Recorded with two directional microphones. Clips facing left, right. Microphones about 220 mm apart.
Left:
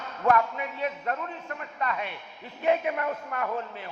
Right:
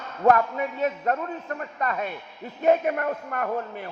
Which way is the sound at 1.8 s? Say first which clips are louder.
Right 2 dB; 45° right (ahead or behind).